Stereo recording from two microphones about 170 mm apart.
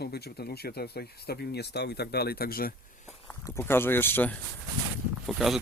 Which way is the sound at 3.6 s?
15° left (ahead or behind).